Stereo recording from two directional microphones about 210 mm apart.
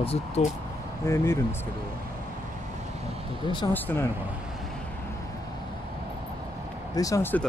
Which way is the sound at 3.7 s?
10° left (ahead or behind).